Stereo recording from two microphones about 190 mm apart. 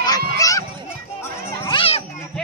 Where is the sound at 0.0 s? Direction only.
20° left (ahead or behind).